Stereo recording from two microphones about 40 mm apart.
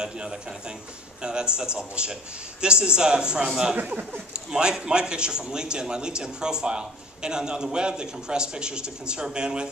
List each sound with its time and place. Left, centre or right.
0.0 s a man's voice: centre